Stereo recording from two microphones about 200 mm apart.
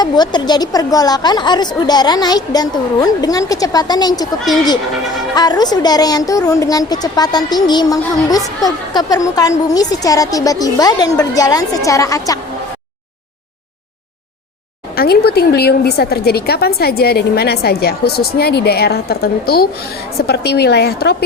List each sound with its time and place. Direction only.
0.0 s speech: 20° left (ahead or behind)
5.3 s a woman's voice: 20° left (ahead or behind)
14.9 s a woman's voice: 50° left (ahead or behind)